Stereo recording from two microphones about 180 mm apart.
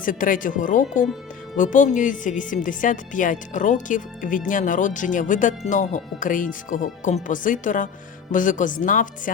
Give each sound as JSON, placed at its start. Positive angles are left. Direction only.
{"t": 0.0, "sound": "speech", "side_deg": 50}